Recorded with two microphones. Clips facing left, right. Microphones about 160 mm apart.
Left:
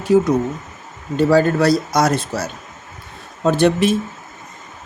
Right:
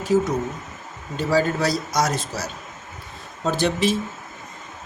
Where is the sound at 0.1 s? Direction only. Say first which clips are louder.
Left 6 dB; 60° left (ahead or behind).